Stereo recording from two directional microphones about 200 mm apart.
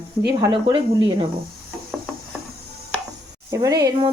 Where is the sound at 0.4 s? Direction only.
20° right (ahead or behind).